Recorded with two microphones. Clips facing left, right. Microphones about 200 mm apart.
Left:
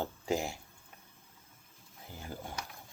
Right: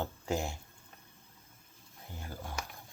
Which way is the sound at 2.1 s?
15° left (ahead or behind).